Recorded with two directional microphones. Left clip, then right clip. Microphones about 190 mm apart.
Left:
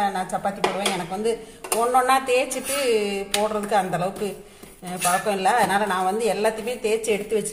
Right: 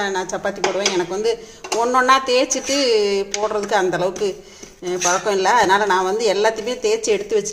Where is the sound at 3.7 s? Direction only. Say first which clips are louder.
Right 6 dB; 40° right (ahead or behind).